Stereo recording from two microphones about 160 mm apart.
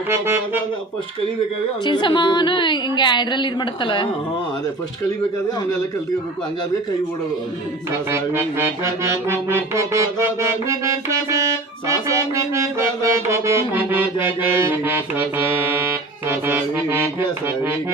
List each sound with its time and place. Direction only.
0.1 s music: 15° right (ahead or behind)
1.8 s a woman's voice: 30° left (ahead or behind)
8.1 s music: 15° right (ahead or behind)